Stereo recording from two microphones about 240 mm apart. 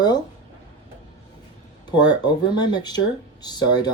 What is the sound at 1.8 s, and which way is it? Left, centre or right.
Speech, centre.